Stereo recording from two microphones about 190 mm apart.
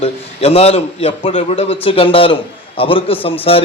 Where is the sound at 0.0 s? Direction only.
30° left (ahead or behind).